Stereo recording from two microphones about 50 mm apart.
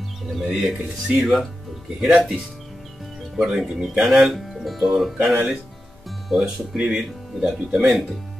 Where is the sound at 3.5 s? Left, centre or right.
Centre.